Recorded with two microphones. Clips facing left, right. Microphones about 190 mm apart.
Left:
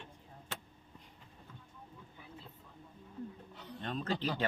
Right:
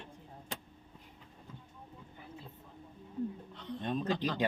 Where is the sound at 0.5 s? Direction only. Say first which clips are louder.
Right 3 dB; 15° right (ahead or behind).